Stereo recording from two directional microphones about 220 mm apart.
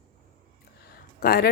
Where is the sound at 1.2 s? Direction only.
45° left (ahead or behind).